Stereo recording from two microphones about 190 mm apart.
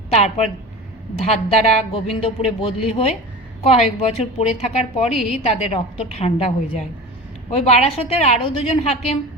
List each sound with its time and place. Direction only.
0.1 s a woman's voice: 35° left (ahead or behind)